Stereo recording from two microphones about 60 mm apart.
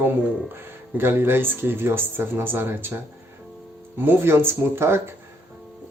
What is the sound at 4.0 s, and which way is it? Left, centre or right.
Speech, right.